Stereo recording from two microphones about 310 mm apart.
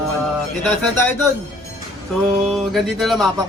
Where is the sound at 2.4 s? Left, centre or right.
Centre.